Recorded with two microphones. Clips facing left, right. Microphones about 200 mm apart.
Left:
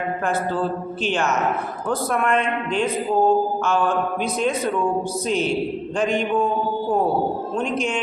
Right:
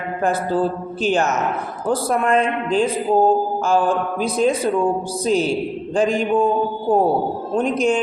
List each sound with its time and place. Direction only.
0.3 s a man's voice: 40° right (ahead or behind)
7.5 s a man's voice: 35° right (ahead or behind)